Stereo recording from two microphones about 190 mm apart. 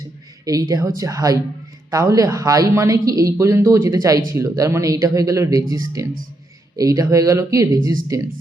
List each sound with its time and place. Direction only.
0.4 s speech: 20° right (ahead or behind)